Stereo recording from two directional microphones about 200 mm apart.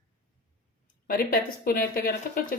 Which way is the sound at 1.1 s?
45° left (ahead or behind).